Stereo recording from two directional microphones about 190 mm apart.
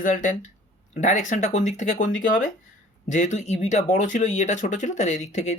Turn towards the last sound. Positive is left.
turn(degrees=35)  # may be behind; listen again after turning